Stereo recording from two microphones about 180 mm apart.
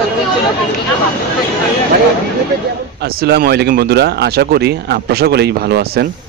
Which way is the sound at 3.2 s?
60° right (ahead or behind).